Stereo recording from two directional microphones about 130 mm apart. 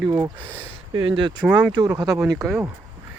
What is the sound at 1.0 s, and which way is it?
Speech, 40° right (ahead or behind).